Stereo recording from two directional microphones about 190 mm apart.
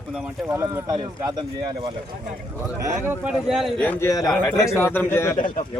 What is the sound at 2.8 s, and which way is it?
A man's voice, 15° right (ahead or behind).